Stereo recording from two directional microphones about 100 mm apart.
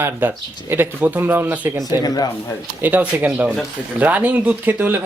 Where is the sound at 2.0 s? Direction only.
40° left (ahead or behind).